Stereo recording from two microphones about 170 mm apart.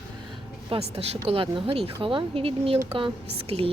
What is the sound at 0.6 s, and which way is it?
Speech, 30° right (ahead or behind).